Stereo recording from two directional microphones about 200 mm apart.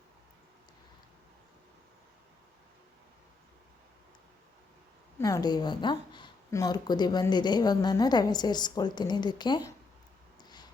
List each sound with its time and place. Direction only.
5.2 s speech: 20° left (ahead or behind)